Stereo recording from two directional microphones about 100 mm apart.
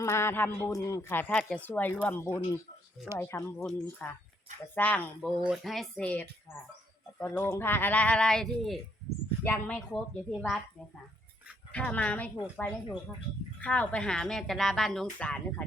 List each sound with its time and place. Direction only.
0.0 s a man's voice: 30° left (ahead or behind)
1.3 s a woman's voice: centre (ahead or behind)
1.5 s speech: 15° left (ahead or behind)
2.2 s a man's voice: 30° left (ahead or behind)
5.4 s a woman's voice: centre (ahead or behind)
6.1 s speech: 15° left (ahead or behind)
9.4 s speech: 15° left (ahead or behind)
11.7 s a woman's voice: 15° left (ahead or behind)
15.2 s speech: 15° left (ahead or behind)